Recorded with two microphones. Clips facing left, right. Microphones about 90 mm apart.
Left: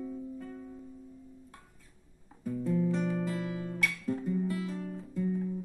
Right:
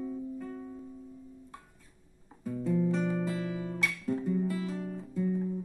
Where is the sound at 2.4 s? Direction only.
20° right (ahead or behind).